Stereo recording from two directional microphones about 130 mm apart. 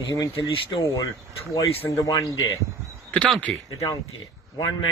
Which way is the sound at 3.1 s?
5° left (ahead or behind).